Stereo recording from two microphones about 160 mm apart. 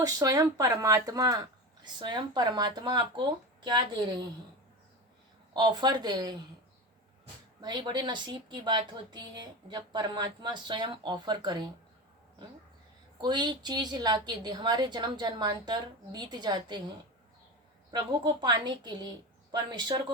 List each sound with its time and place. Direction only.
0.0 s speech: 20° right (ahead or behind)
5.5 s speech: 25° right (ahead or behind)
7.6 s speech: 25° right (ahead or behind)
13.2 s speech: 25° right (ahead or behind)
17.9 s speech: 25° right (ahead or behind)